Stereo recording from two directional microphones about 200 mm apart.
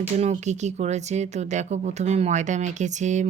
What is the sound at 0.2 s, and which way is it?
Speech, 35° right (ahead or behind).